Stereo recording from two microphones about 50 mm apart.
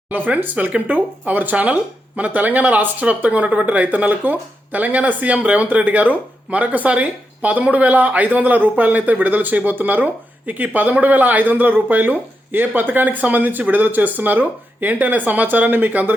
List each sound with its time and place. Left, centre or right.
0.1 s speech: right